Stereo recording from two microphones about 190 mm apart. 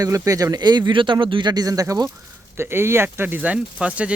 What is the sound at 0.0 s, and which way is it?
Speech, 20° right (ahead or behind).